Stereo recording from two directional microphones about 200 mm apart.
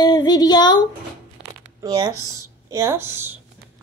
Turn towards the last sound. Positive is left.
turn(degrees=-10)  # may be behind; listen again after turning